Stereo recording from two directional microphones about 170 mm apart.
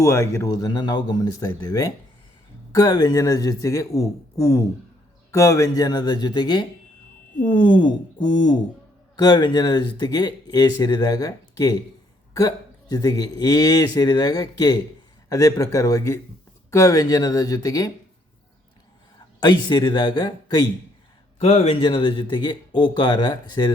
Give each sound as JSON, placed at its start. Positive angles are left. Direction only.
{"t": 0.0, "sound": "speech", "side_deg": 15}
{"t": 19.4, "sound": "speech", "side_deg": 25}
{"t": 21.3, "sound": "speech", "side_deg": 40}